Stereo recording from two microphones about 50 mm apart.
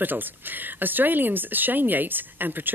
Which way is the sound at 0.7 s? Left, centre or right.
Right.